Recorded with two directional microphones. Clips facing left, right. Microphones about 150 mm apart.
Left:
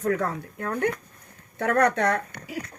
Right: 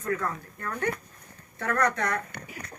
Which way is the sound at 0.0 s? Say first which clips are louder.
Left 5 dB; 75° left (ahead or behind).